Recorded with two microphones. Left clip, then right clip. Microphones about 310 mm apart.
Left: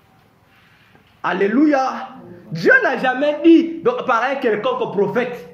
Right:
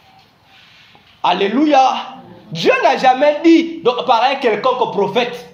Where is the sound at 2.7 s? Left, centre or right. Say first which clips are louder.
Right 3 dB; centre.